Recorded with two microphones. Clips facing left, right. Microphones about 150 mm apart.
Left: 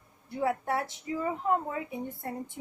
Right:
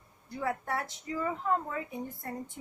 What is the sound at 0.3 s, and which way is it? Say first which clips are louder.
A woman's voice: left 4 dB; 25° left (ahead or behind).